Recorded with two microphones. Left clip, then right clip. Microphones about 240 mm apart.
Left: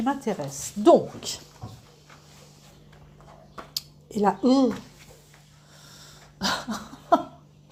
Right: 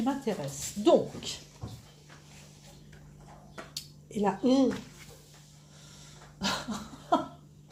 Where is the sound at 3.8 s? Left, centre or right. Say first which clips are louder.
Left 7 dB; left.